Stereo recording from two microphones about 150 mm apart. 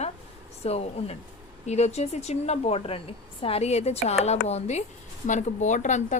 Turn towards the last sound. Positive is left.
turn(degrees=55)  # may be behind; listen again after turning